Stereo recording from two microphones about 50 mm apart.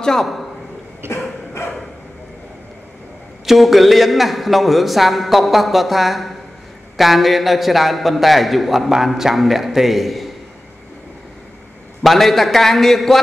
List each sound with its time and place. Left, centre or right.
0.0 s a man's voice: centre
1.0 s a sound: right
3.4 s a man's voice: centre
12.0 s a man's voice: centre